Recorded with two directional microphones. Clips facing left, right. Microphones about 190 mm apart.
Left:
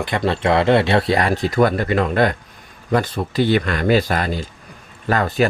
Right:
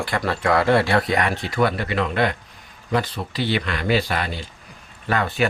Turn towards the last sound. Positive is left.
turn(degrees=40)  # may be behind; listen again after turning